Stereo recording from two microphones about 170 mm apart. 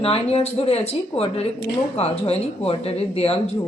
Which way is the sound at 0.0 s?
35° left (ahead or behind).